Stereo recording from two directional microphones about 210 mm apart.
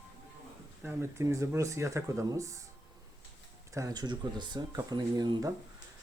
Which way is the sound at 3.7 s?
15° right (ahead or behind).